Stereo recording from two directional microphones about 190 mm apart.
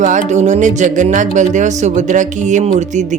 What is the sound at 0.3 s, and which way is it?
Speech, 35° right (ahead or behind).